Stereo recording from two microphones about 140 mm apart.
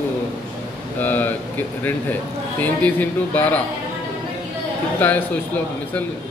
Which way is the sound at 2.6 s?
10° left (ahead or behind).